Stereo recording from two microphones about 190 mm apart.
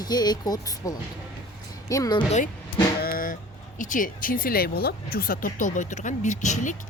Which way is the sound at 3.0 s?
50° left (ahead or behind).